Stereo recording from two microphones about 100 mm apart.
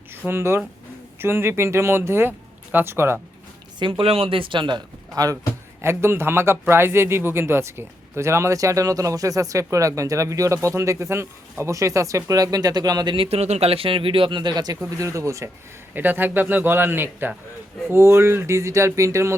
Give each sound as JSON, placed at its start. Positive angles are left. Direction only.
{"t": 0.3, "sound": "speech", "side_deg": -25}
{"t": 3.8, "sound": "speech", "side_deg": -60}
{"t": 5.8, "sound": "a man's voice", "side_deg": -25}
{"t": 13.1, "sound": "speech", "side_deg": -90}
{"t": 14.8, "sound": "a man's voice", "side_deg": -30}
{"t": 16.0, "sound": "speech", "side_deg": -20}